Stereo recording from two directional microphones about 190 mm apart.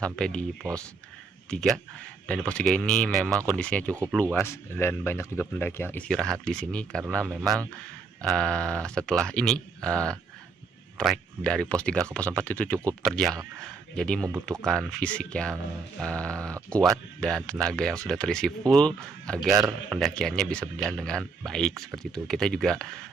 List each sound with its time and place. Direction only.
0.0 s speech: 5° left (ahead or behind)
0.6 s speech: 20° right (ahead or behind)
1.5 s speech: 5° left (ahead or behind)
7.2 s speech: 10° right (ahead or behind)
8.2 s speech: 5° left (ahead or behind)